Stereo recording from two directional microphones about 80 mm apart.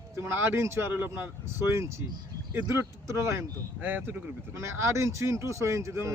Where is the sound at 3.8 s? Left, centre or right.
Right.